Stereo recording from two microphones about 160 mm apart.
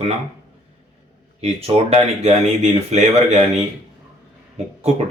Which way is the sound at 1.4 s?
40° right (ahead or behind).